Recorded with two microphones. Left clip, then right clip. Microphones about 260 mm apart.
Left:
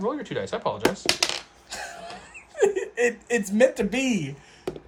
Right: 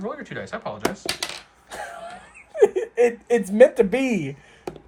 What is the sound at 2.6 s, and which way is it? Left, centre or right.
Speech, right.